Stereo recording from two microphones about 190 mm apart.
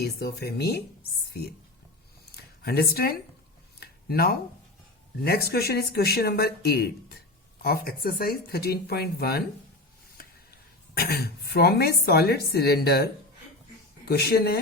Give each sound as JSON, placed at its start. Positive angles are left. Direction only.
{"t": 0.0, "sound": "speech", "side_deg": 60}
{"t": 2.6, "sound": "speech", "side_deg": 55}
{"t": 3.8, "sound": "a sound", "side_deg": 55}
{"t": 5.2, "sound": "speech", "side_deg": 55}
{"t": 10.9, "sound": "speech", "side_deg": 55}